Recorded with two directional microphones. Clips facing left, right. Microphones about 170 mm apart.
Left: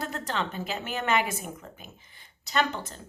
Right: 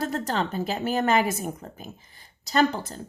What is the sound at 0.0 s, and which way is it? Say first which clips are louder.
A woman's voice: right 5 dB; 40° right (ahead or behind).